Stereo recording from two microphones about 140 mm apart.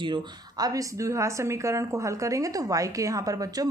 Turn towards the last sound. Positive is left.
turn(degrees=-25)  # may be behind; listen again after turning